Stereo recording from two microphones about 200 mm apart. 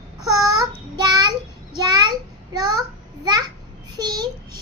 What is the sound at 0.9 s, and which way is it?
Child singing, 20° right (ahead or behind).